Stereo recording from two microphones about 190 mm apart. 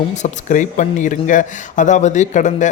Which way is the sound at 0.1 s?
40° left (ahead or behind).